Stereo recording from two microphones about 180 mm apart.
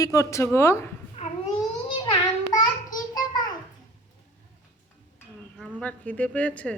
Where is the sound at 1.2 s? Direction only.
35° left (ahead or behind).